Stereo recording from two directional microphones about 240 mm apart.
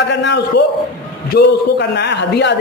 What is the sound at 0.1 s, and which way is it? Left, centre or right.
A man's voice, left.